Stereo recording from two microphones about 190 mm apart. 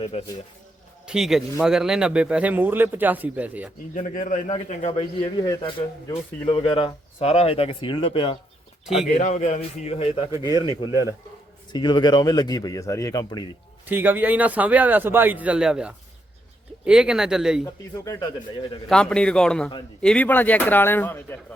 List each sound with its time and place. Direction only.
0.0 s speech: 30° left (ahead or behind)
1.0 s a man's voice: 5° right (ahead or behind)
3.9 s a man's voice: 45° left (ahead or behind)
4.9 s a man's voice: 25° left (ahead or behind)
9.1 s a man's voice: 40° left (ahead or behind)
11.7 s a man's voice: 25° left (ahead or behind)
13.8 s a man's voice: 10° right (ahead or behind)
17.9 s a man's voice: 15° left (ahead or behind)
18.9 s a man's voice: 5° left (ahead or behind)